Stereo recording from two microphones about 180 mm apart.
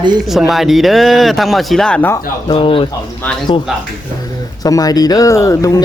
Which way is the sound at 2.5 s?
30° left (ahead or behind).